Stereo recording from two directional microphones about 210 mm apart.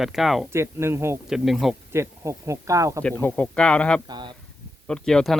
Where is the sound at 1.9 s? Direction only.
15° right (ahead or behind).